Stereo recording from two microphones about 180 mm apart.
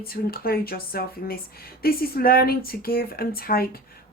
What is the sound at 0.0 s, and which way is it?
Speech, 55° left (ahead or behind).